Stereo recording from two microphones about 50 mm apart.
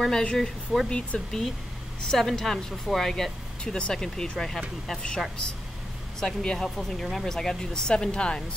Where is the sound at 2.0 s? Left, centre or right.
Centre.